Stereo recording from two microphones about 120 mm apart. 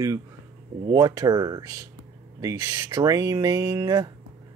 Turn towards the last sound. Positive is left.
turn(degrees=-30)  # may be behind; listen again after turning